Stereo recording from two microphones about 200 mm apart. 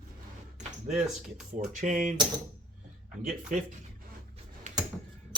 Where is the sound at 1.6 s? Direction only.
40° right (ahead or behind).